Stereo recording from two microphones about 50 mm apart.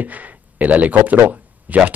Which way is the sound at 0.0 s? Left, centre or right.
Right.